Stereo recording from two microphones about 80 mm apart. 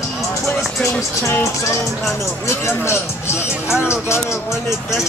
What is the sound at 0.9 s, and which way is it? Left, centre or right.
Speech, left.